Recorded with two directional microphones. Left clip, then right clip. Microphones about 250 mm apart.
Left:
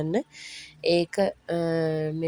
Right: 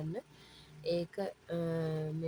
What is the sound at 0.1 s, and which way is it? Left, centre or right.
Speech, left.